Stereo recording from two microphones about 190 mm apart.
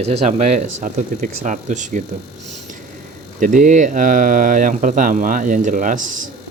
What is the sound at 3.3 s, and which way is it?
Speech, 45° right (ahead or behind).